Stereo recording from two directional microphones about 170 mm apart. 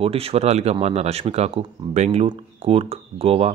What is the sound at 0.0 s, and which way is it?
Speech, 35° right (ahead or behind).